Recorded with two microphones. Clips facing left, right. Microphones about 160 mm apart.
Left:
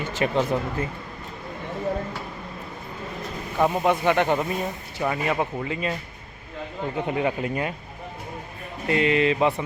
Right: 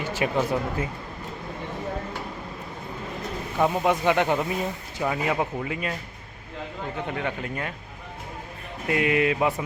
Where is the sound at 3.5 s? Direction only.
10° left (ahead or behind).